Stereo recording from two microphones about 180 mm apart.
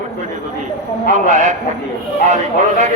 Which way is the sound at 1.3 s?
40° right (ahead or behind).